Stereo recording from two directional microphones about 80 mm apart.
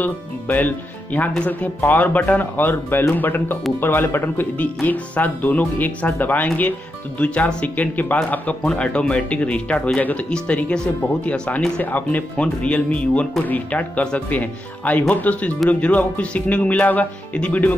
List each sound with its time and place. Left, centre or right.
0.0 s speech: left